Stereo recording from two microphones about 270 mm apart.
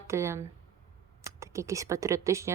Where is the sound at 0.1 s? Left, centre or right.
Centre.